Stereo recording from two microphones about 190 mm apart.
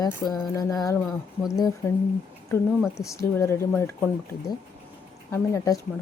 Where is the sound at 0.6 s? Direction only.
20° left (ahead or behind).